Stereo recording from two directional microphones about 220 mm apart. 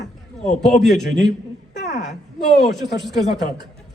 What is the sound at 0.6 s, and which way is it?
Speech, centre (ahead or behind).